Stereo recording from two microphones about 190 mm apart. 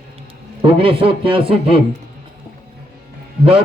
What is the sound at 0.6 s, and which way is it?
A man's voice, 30° right (ahead or behind).